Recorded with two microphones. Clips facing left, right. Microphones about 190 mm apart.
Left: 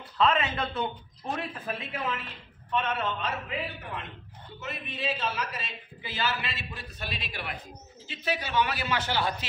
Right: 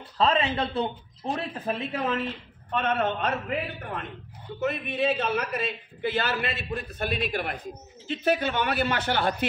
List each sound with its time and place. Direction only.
0.2 s a man's voice: 30° right (ahead or behind)
2.7 s a man's voice: 55° right (ahead or behind)